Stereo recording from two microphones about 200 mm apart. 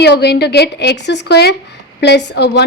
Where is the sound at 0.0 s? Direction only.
60° left (ahead or behind).